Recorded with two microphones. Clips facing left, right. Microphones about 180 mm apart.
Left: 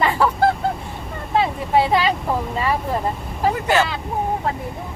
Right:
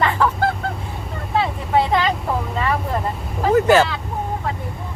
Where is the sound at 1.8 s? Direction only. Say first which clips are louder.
Left 1 dB; 5° left (ahead or behind).